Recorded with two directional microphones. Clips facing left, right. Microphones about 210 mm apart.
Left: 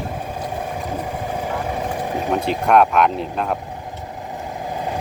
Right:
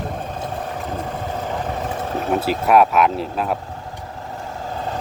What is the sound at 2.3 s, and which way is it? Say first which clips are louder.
Speech: right 1 dB; 5° right (ahead or behind).